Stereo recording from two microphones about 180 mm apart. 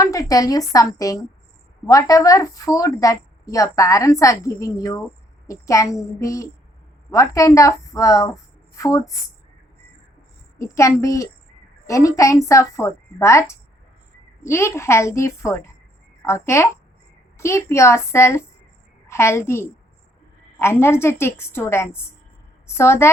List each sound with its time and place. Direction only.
0.0 s a woman's voice: 20° left (ahead or behind)
10.6 s a woman's voice: 15° left (ahead or behind)